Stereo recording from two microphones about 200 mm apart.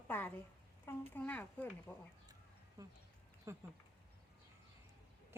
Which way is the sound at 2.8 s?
15° right (ahead or behind).